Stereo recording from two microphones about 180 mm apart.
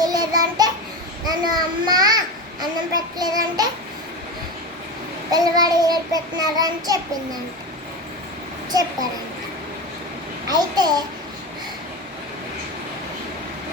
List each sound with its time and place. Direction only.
0.0 s child singing: 20° right (ahead or behind)
1.3 s a child's voice: 20° right (ahead or behind)
5.3 s child singing: 20° right (ahead or behind)
10.5 s child singing: 20° right (ahead or behind)